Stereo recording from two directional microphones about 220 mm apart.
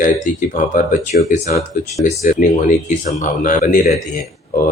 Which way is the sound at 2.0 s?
35° left (ahead or behind).